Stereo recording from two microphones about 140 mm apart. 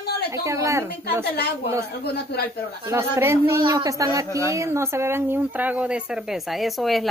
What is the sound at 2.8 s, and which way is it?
Speech, 20° right (ahead or behind).